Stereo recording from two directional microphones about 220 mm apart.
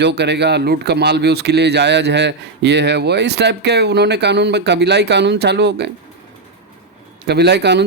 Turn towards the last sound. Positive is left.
turn(degrees=-50)  # may be behind; listen again after turning